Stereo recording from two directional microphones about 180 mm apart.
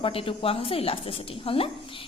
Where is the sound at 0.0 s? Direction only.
30° left (ahead or behind).